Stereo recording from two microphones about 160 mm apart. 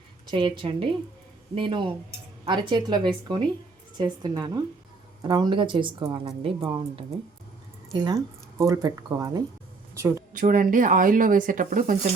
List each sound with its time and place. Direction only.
0.3 s a woman's voice: 30° right (ahead or behind)
9.9 s a sound: 15° right (ahead or behind)
10.3 s speech: 55° right (ahead or behind)